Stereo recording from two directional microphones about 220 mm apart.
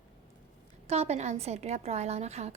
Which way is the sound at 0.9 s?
30° right (ahead or behind).